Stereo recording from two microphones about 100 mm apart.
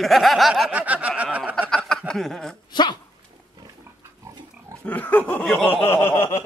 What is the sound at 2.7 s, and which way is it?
Speech, 50° left (ahead or behind).